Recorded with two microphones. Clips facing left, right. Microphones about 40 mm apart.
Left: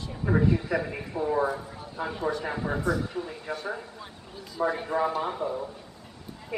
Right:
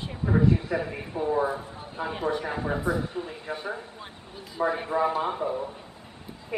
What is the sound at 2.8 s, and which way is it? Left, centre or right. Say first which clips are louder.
Speech: even; right.